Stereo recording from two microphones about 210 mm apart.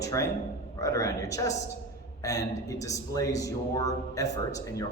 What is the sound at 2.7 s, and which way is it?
A man's voice, 15° left (ahead or behind).